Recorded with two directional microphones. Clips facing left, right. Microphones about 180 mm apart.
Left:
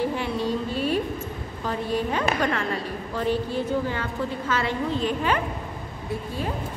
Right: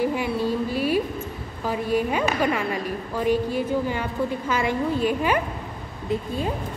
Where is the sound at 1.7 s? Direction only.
10° right (ahead or behind).